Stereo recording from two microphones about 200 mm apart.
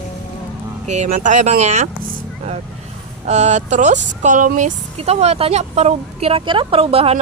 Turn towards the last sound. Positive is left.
turn(degrees=-30)  # may be behind; listen again after turning